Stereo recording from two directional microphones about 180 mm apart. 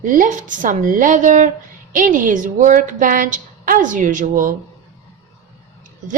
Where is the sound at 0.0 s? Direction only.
50° right (ahead or behind).